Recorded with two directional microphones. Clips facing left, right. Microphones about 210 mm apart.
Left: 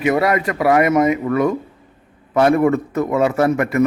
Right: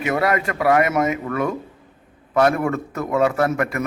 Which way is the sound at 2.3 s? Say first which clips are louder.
Left 4 dB; centre (ahead or behind).